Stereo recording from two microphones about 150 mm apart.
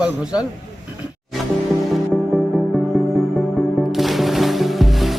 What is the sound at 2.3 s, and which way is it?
Music, 5° left (ahead or behind).